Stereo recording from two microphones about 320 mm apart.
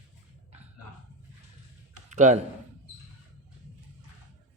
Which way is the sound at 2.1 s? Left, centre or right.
Right.